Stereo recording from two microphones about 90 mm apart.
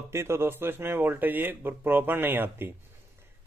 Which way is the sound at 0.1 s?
30° right (ahead or behind).